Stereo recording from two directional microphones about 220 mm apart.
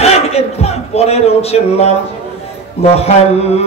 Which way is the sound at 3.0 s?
30° left (ahead or behind).